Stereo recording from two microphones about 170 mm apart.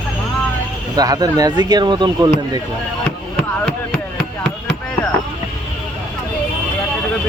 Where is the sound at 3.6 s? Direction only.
5° left (ahead or behind).